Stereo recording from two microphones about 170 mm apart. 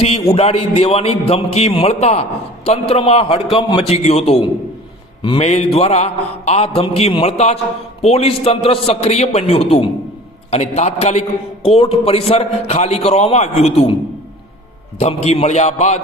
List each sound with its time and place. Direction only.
0.0 s a man's voice: 35° left (ahead or behind)
14.9 s a man's voice: 40° left (ahead or behind)